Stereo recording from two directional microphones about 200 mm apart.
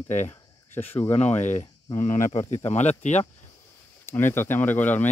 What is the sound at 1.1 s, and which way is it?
Speech, 35° left (ahead or behind).